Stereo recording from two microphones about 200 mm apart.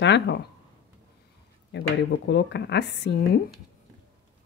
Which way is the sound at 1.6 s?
60° left (ahead or behind).